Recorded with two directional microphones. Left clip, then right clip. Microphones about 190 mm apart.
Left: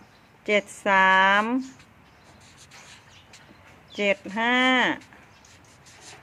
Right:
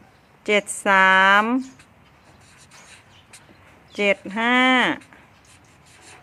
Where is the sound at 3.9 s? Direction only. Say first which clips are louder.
Right 3 dB; 20° right (ahead or behind).